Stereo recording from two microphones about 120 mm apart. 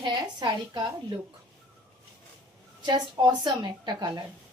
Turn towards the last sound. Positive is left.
turn(degrees=-35)  # may be behind; listen again after turning